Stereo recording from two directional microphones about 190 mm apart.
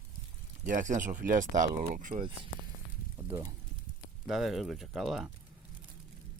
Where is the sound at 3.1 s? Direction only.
10° right (ahead or behind).